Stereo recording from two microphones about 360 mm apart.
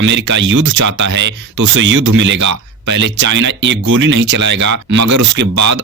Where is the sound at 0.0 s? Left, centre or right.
Right.